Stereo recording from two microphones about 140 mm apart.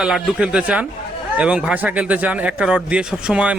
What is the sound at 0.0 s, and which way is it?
A man's voice, 5° right (ahead or behind).